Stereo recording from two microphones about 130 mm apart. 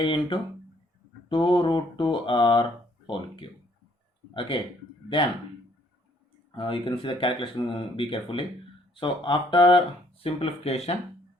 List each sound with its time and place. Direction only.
0.0 s speech: 40° left (ahead or behind)
4.4 s speech: 40° left (ahead or behind)
6.5 s speech: 40° left (ahead or behind)